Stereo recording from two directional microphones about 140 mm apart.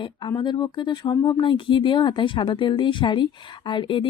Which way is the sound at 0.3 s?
30° left (ahead or behind).